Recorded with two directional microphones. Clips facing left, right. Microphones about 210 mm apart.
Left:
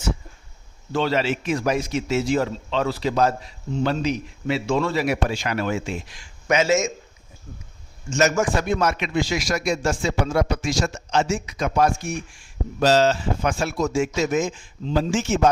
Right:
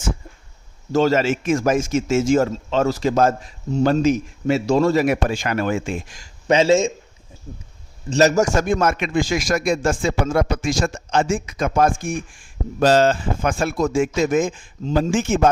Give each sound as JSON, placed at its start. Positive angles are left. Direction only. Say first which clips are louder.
{"t": 0.9, "sound": "a man's voice", "louder": "right 5 dB", "side_deg": -45}
{"t": 6.5, "sound": "speech", "louder": "right 4 dB", "side_deg": -30}
{"t": 8.1, "sound": "a man's voice", "louder": "right 4 dB", "side_deg": -35}